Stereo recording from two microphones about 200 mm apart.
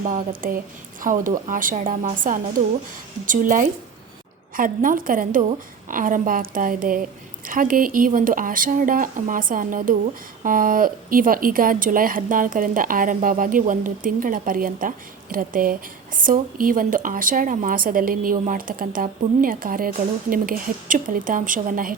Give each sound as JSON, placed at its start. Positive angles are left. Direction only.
{"t": 0.0, "sound": "speech", "side_deg": -40}